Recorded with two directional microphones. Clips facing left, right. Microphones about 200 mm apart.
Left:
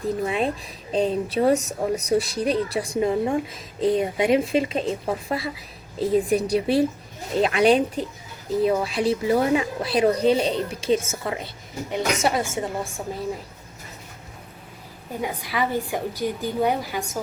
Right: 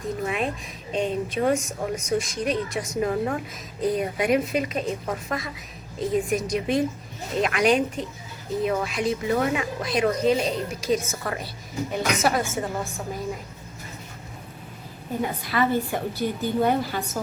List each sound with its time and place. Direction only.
0.0 s a woman's voice: 30° left (ahead or behind)
15.2 s a woman's voice: 10° left (ahead or behind)